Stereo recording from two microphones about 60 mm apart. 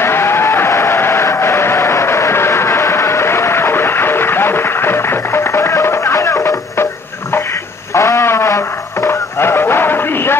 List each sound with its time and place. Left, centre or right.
0.0 s vehicle: left
6.1 s music: left
7.9 s music: left